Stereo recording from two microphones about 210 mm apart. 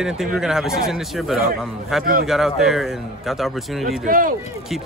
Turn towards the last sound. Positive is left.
turn(degrees=-40)  # may be behind; listen again after turning